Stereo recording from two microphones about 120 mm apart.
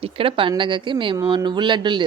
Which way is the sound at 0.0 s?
50° right (ahead or behind).